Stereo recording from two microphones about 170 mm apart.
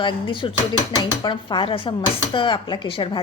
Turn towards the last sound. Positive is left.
turn(degrees=30)  # may be behind; listen again after turning